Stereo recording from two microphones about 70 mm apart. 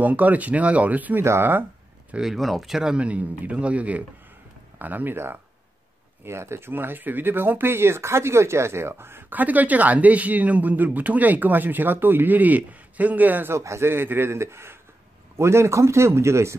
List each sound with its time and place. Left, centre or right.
0.0 s speech: right
1.2 s speech: right
2.1 s speech: centre; by 13.5 s right
13.5 s speech: right